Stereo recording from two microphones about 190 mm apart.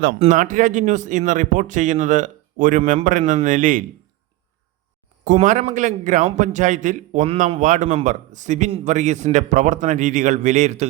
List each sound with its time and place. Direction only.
0.2 s a man's voice: 45° right (ahead or behind)
5.2 s a man's voice: 40° right (ahead or behind)